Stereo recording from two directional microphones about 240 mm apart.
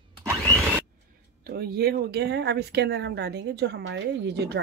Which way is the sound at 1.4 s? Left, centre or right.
Right.